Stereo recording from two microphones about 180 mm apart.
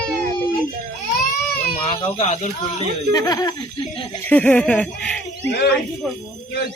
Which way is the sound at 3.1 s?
20° left (ahead or behind).